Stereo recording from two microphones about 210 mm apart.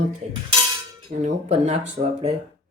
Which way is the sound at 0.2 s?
30° right (ahead or behind).